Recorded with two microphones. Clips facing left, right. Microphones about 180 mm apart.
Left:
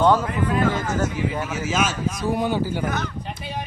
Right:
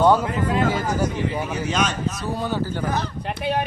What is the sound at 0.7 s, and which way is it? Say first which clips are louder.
Speech: right 1 dB; 10° right (ahead or behind).